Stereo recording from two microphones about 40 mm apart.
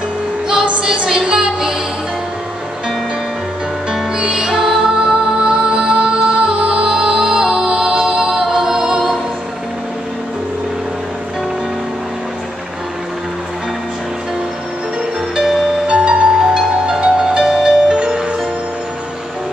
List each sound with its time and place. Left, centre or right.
1.0 s music: centre
3.9 s music: centre
4.5 s music: centre
15.3 s music: centre
15.9 s music: right
16.3 s music: centre